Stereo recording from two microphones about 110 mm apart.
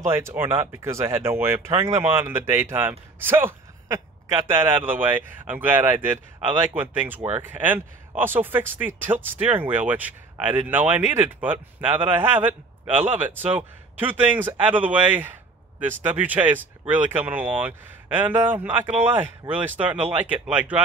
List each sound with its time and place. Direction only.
0.1 s speech: 20° right (ahead or behind)